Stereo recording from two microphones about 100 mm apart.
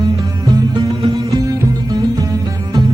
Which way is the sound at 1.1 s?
35° right (ahead or behind).